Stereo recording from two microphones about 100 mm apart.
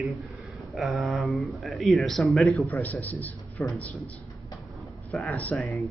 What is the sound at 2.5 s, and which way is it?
A man's voice, 15° left (ahead or behind).